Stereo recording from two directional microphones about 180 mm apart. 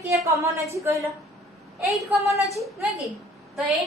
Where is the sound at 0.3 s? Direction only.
15° right (ahead or behind).